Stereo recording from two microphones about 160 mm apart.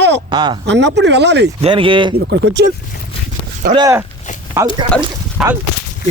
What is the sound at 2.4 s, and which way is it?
Speech, 90° right.